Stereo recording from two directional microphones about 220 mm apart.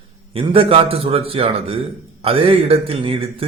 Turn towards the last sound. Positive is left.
turn(degrees=-25)  # may be behind; listen again after turning